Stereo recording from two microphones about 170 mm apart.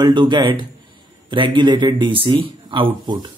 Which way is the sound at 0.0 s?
25° right (ahead or behind).